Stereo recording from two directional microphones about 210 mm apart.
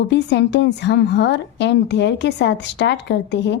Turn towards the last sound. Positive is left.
turn(degrees=55)  # may be behind; listen again after turning